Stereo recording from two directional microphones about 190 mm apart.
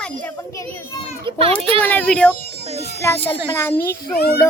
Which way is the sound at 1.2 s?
30° right (ahead or behind).